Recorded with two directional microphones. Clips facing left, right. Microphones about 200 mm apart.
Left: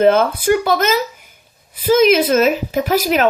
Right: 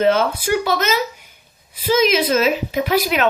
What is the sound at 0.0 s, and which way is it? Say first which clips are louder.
Speech: left 4 dB; 50° left (ahead or behind).